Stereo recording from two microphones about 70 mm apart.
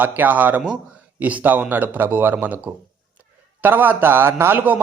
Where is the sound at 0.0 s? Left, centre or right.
Right.